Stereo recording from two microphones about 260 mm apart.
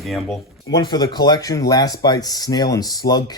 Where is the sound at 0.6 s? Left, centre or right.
Centre.